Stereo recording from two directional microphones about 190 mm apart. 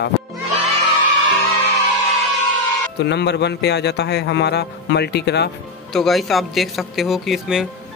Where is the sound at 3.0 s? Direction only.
65° left (ahead or behind).